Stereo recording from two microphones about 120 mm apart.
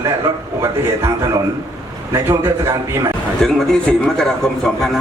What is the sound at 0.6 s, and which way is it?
Speech, 25° right (ahead or behind).